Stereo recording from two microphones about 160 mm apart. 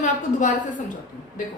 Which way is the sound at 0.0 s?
50° left (ahead or behind).